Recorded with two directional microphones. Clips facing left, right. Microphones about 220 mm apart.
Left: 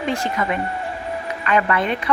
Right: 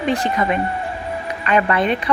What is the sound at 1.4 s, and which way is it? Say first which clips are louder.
Speech: right 2 dB; 20° right (ahead or behind).